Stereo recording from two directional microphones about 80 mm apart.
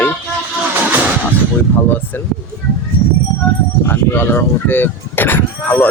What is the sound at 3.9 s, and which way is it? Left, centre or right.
Speech, left.